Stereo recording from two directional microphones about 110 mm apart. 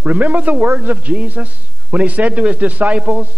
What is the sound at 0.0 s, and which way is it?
A man's voice, 15° right (ahead or behind).